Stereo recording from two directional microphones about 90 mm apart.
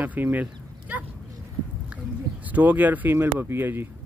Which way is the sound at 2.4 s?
20° right (ahead or behind).